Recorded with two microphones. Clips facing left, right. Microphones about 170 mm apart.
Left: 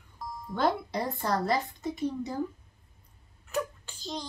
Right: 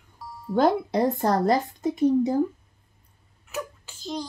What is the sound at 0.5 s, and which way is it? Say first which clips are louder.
A woman's voice: right 7 dB; 45° right (ahead or behind).